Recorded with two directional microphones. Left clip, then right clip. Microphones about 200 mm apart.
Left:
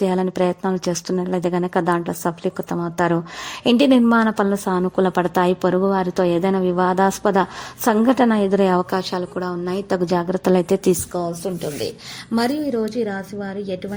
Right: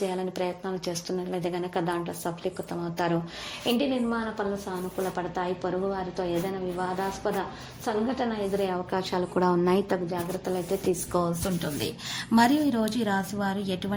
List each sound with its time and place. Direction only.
0.0 s a woman's voice: 50° left (ahead or behind)
8.9 s a woman's voice: 25° left (ahead or behind)
9.3 s a woman's voice: centre (ahead or behind)
10.1 s a woman's voice: 55° left (ahead or behind)
12.3 s a woman's voice: 15° left (ahead or behind)